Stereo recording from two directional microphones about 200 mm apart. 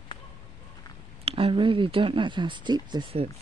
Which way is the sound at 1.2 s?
30° right (ahead or behind).